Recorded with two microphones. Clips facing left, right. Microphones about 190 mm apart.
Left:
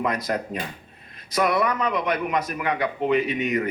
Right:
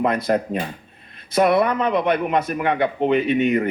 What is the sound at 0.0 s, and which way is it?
A man's voice, 30° right (ahead or behind).